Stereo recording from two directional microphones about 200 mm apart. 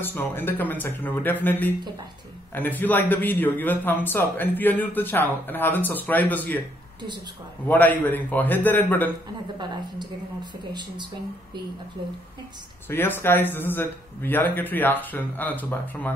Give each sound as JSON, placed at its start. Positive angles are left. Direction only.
{"t": 0.0, "sound": "a man's voice", "side_deg": 10}
{"t": 7.6, "sound": "a man's voice", "side_deg": 10}
{"t": 10.6, "sound": "speech", "side_deg": -20}
{"t": 12.9, "sound": "a man's voice", "side_deg": 10}